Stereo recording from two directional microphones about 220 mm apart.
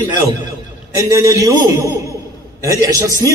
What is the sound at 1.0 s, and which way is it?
Speech, 15° right (ahead or behind).